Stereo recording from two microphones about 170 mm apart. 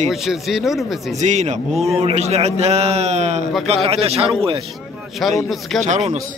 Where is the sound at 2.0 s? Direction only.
35° right (ahead or behind).